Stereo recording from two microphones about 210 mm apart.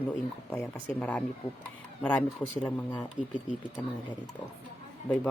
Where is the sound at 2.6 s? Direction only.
10° left (ahead or behind).